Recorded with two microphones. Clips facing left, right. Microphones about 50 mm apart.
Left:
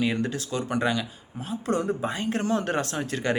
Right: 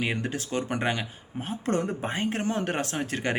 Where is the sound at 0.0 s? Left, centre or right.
Right.